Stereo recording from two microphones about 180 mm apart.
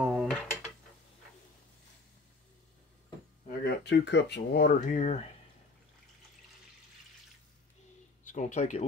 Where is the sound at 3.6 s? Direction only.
70° left (ahead or behind); by 5.3 s 40° left (ahead or behind).